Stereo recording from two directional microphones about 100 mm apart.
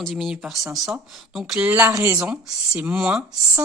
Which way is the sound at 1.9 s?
40° right (ahead or behind).